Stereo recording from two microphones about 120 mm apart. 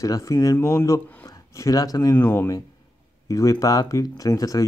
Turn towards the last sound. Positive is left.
turn(degrees=30)  # may be behind; listen again after turning